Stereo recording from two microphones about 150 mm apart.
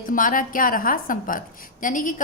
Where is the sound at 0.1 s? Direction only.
65° left (ahead or behind).